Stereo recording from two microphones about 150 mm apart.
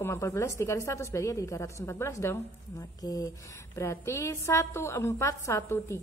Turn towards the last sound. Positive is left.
turn(degrees=20)  # may be behind; listen again after turning